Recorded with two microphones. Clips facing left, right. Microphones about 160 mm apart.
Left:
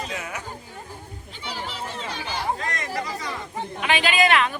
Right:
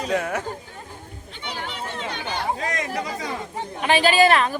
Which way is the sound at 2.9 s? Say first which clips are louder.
Right 2 dB; 45° right (ahead or behind).